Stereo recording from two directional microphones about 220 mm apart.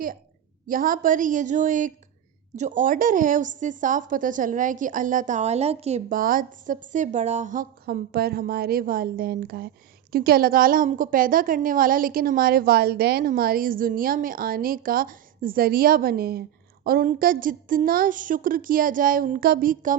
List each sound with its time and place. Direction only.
0.7 s a woman's voice: 40° right (ahead or behind)